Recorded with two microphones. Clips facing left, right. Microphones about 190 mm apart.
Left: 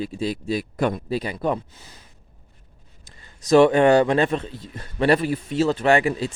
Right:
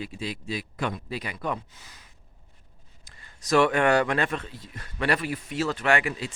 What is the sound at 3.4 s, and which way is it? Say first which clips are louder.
A man's voice: left 7 dB; 25° left (ahead or behind).